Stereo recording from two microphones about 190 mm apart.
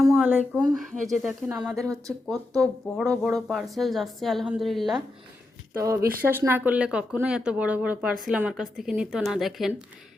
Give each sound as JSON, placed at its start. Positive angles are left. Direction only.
{"t": 0.0, "sound": "a sound", "side_deg": 0}
{"t": 0.7, "sound": "speech", "side_deg": 0}
{"t": 5.8, "sound": "speech", "side_deg": -15}